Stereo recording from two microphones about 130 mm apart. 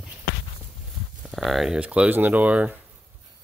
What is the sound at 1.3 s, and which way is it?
Speech, centre (ahead or behind).